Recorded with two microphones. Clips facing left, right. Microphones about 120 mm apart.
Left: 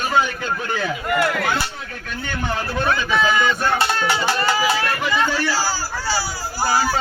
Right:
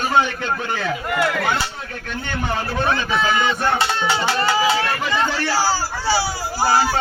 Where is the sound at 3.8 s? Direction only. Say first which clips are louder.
Even; 15° right (ahead or behind).